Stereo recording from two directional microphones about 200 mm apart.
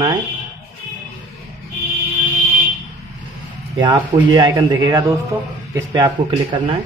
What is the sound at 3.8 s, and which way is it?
Speech, 20° right (ahead or behind).